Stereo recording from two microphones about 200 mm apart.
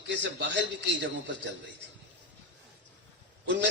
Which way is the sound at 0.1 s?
60° right (ahead or behind).